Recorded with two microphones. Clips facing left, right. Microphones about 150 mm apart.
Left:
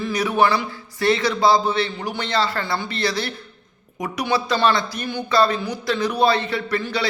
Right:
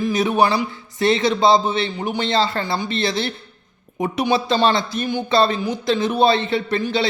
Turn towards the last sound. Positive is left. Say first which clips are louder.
# right 4 dB
turn(degrees=-20)  # may be behind; listen again after turning